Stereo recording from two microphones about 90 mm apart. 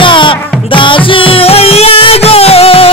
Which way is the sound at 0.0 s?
70° left (ahead or behind).